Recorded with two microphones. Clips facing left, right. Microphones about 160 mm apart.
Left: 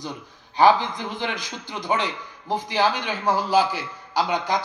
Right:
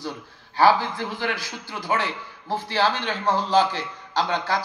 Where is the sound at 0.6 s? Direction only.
20° left (ahead or behind).